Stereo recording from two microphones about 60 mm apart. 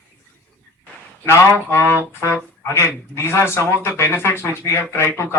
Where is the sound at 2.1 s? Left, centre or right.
Left.